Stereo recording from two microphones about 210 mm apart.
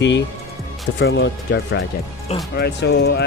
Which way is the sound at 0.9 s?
60° left (ahead or behind).